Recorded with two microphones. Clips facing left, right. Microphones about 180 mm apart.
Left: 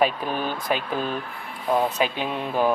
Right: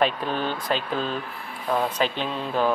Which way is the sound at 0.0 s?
10° left (ahead or behind).